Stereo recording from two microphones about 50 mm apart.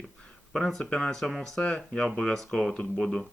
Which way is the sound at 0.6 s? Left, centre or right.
Centre.